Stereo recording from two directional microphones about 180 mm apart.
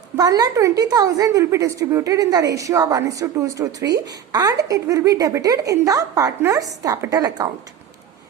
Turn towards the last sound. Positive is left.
turn(degrees=-20)  # may be behind; listen again after turning